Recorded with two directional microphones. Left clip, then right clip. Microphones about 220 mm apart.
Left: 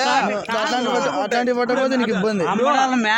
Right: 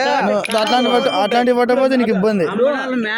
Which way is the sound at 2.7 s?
35° left (ahead or behind).